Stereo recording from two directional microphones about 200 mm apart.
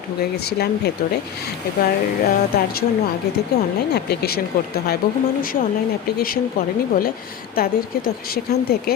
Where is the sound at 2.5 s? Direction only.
50° left (ahead or behind).